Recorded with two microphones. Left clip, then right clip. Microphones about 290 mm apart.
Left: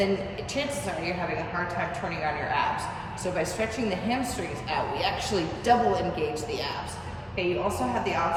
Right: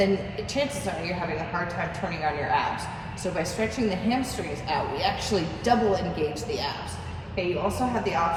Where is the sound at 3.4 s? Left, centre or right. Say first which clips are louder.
Right 2 dB; centre.